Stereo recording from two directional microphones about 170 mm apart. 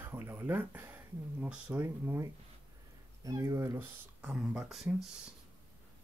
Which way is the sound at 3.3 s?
20° right (ahead or behind).